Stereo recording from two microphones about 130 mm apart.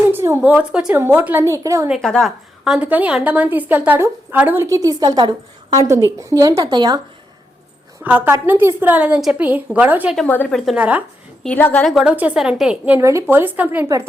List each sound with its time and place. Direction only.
0.1 s a woman's voice: 20° right (ahead or behind)
2.0 s a woman's voice: 5° left (ahead or behind); by 7.0 s 35° right (ahead or behind)
8.0 s a woman's voice: 15° right (ahead or behind)
10.2 s a woman's voice: 10° left (ahead or behind)
10.8 s a woman's voice: 10° right (ahead or behind)
11.4 s a woman's voice: 15° left (ahead or behind)
11.9 s a woman's voice: 5° right (ahead or behind)
13.0 s a woman's voice: 20° right (ahead or behind)